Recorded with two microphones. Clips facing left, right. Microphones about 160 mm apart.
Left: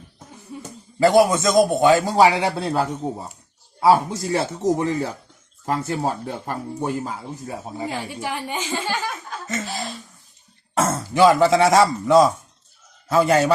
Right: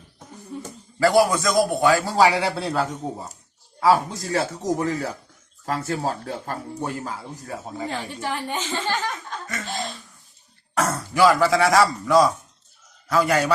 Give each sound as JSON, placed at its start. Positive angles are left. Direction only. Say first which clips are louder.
{"t": 0.9, "sound": "a man's voice", "louder": "left 3 dB", "side_deg": 20}
{"t": 10.8, "sound": "a man's voice", "louder": "left 2 dB", "side_deg": 25}